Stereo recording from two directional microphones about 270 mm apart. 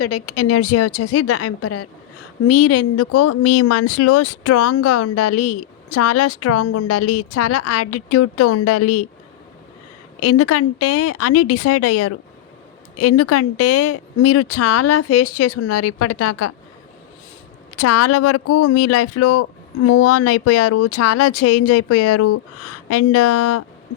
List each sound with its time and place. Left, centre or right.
0.0 s speech: left
10.2 s speech: left
17.7 s speech: left